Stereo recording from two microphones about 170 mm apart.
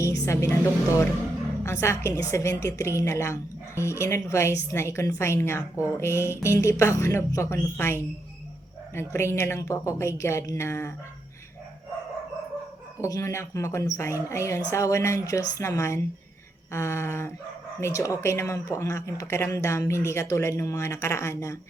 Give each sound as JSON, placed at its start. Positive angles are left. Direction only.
{"t": 0.3, "sound": "speech", "side_deg": 15}
{"t": 13.0, "sound": "speech", "side_deg": 20}